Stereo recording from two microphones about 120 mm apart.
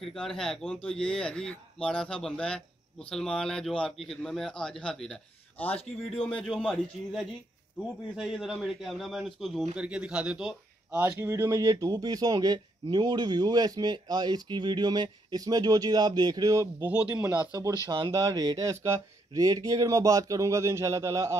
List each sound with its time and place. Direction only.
0.0 s speech: 5° left (ahead or behind)
11.1 s speech: 20° right (ahead or behind)
16.8 s speech: 10° right (ahead or behind)
18.1 s speech: 30° right (ahead or behind)